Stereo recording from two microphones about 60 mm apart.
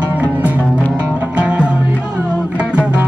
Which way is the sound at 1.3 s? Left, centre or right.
Centre.